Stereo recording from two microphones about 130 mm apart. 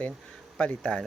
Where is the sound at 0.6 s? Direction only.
10° left (ahead or behind).